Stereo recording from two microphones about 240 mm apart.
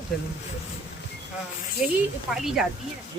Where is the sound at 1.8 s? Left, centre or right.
Left.